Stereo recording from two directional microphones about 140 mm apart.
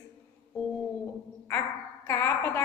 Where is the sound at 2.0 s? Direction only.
15° left (ahead or behind).